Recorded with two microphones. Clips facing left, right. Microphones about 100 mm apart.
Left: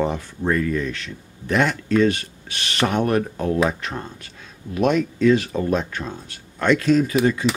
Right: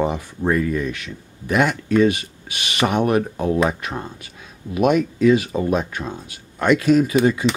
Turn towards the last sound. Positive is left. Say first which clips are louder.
# right 2 dB
turn(degrees=-10)  # may be behind; listen again after turning